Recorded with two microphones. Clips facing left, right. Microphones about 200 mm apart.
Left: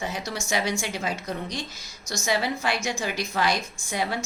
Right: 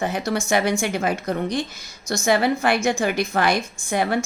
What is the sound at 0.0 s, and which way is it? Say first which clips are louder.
A woman's voice: right 8 dB; 55° right (ahead or behind).